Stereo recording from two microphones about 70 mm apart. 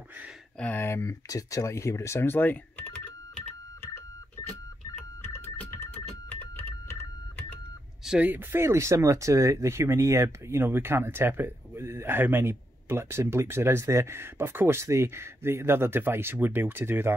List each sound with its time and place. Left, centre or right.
0.7 s speech: left
1.0 s speech: left
5.2 s a sound: left
8.2 s speech: right